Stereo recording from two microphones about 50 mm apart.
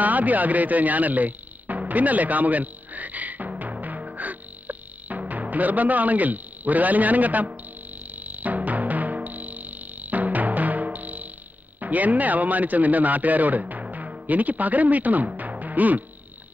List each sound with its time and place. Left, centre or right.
0.0 s music: right
8.1 s timpani: right
11.8 s a man's voice: right